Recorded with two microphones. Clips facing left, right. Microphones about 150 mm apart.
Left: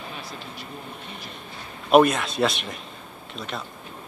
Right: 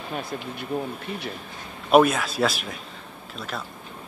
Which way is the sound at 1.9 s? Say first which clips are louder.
Left 1 dB; centre (ahead or behind).